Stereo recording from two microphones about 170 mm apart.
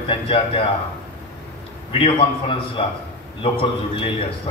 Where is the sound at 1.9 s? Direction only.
30° left (ahead or behind).